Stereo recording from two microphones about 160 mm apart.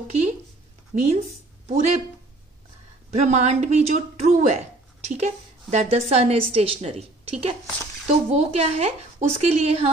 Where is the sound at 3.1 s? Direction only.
45° right (ahead or behind).